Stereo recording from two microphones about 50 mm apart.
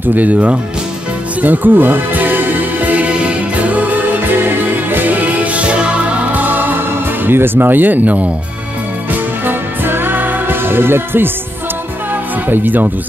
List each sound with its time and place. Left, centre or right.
0.1 s speech: right
1.4 s music: right
5.6 s music: right
6.3 s music: right
7.2 s speech: right
9.5 s music: right
12.4 s speech: right